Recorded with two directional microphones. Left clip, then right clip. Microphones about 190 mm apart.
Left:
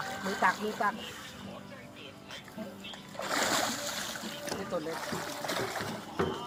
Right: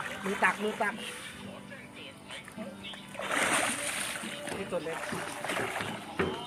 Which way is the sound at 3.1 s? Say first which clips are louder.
Right 1 dB; centre (ahead or behind).